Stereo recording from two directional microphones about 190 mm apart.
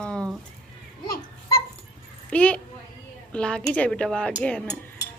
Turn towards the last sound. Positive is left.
turn(degrees=5)  # may be behind; listen again after turning